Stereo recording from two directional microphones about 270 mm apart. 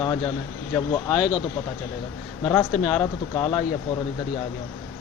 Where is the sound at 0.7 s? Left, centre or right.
Centre.